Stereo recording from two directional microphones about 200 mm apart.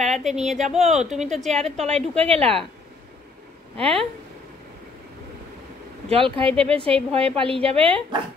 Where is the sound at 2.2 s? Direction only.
30° right (ahead or behind).